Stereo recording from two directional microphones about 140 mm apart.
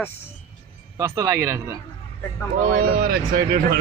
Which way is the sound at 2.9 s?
90° right.